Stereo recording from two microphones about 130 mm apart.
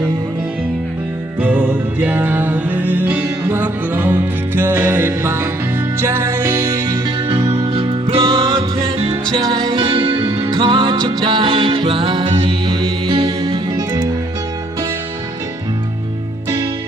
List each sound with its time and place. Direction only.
1.4 s music: 15° right (ahead or behind)
7.3 s music: 50° right (ahead or behind)
13.7 s music: 25° right (ahead or behind)